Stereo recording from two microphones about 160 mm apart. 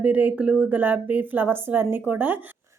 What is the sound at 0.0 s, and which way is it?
A woman's voice, 10° right (ahead or behind).